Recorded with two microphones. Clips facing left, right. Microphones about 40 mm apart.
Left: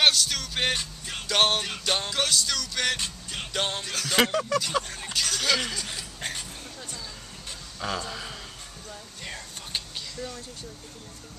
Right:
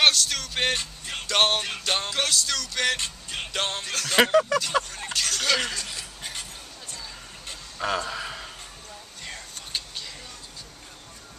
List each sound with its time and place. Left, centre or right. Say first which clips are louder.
0.0 s music: right 1 dB; centre
4.2 s speech: right 5 dB; centre
4.9 s speech: right 1 dB; centre
7.4 s a sound: right 4 dB; centre
9.2 s whispering: even; centre